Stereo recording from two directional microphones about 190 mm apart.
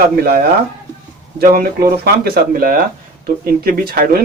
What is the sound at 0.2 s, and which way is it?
Speech, 55° right (ahead or behind).